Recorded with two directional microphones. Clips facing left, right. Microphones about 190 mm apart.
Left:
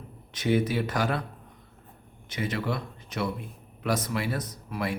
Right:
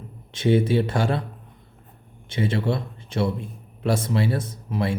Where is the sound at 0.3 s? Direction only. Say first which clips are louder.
Right 5 dB; 30° right (ahead or behind).